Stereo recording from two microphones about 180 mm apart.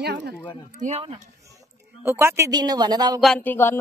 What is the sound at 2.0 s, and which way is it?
Speech, 15° right (ahead or behind).